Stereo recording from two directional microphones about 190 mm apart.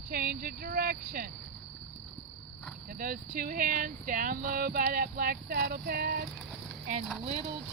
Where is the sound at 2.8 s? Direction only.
50° right (ahead or behind).